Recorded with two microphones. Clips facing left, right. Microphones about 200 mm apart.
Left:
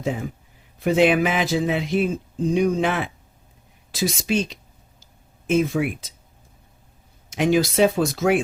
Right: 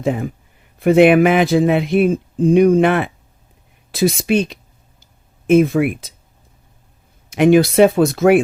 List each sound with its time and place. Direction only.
0.0 s speech: 60° right (ahead or behind)
7.3 s speech: 60° right (ahead or behind)